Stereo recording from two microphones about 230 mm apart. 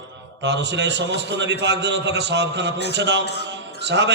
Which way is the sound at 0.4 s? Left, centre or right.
Right.